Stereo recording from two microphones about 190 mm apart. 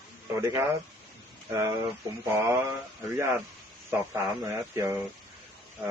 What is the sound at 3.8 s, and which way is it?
A man's voice, 15° right (ahead or behind).